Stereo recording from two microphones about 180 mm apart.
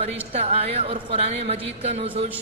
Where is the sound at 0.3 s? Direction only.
35° right (ahead or behind).